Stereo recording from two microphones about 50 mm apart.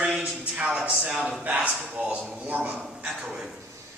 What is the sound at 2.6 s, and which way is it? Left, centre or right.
Speech, centre.